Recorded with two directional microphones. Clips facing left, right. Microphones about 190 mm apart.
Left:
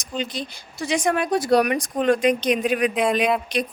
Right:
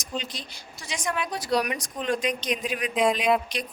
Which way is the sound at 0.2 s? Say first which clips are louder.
Left 8 dB; 55° left (ahead or behind).